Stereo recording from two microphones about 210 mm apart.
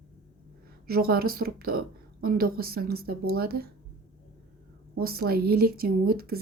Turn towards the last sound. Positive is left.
turn(degrees=-45)  # may be behind; listen again after turning